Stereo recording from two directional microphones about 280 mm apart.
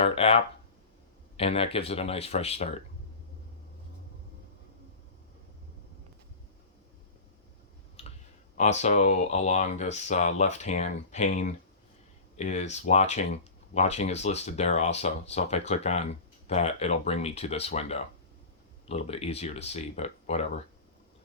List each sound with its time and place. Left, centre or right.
0.0 s speech: left
8.0 s clicking: left
8.5 s speech: left